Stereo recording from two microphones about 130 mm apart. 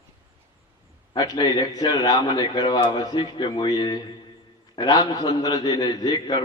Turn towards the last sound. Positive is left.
turn(degrees=30)  # may be behind; listen again after turning